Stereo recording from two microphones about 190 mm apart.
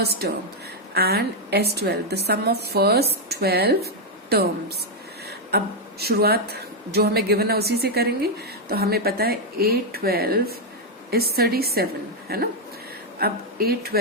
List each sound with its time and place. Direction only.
0.0 s a woman's voice: 55° right (ahead or behind)
5.5 s a woman's voice: 55° right (ahead or behind)